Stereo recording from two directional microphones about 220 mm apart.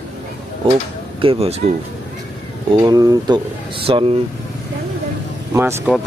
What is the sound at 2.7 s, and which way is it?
Speech, 15° right (ahead or behind).